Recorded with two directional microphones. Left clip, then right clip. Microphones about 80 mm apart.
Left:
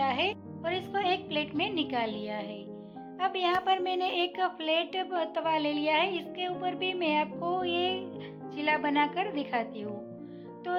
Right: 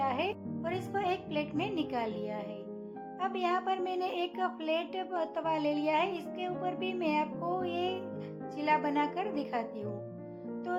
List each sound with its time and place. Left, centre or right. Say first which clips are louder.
0.0 s music: left 3 dB; left
0.6 s music: left 4 dB; left
3.2 s a woman's voice: left 4 dB; left